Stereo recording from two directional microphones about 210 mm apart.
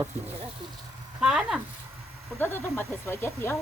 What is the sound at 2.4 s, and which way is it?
Speech, 10° left (ahead or behind).